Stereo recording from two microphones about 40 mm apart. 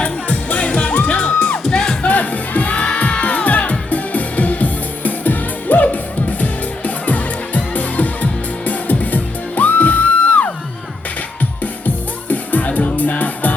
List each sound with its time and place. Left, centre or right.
0.0 s music: left; by 2.0 s centre
2.0 s music: left
12.3 s music: left